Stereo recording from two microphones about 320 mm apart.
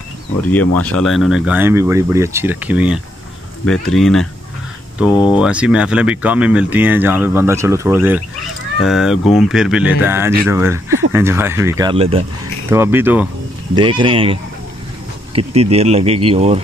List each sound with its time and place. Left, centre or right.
0.8 s speech: centre
5.3 s speech: centre